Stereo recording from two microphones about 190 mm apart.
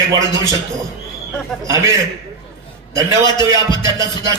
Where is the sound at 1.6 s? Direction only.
15° right (ahead or behind).